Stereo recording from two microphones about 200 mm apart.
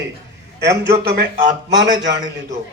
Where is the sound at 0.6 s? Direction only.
55° right (ahead or behind).